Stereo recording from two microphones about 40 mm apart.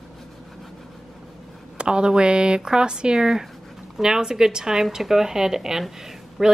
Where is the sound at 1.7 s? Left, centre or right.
Right.